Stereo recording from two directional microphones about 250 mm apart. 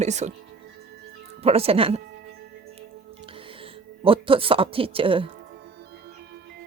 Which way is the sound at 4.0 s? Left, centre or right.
Right.